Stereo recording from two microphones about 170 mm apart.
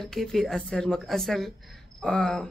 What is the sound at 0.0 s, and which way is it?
Speech, centre (ahead or behind).